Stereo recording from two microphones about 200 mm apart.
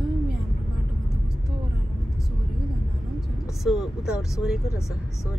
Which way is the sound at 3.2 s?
Centre (ahead or behind).